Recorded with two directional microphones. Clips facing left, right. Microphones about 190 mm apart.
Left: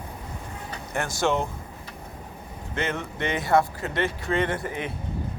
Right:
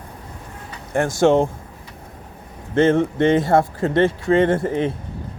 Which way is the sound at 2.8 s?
25° right (ahead or behind).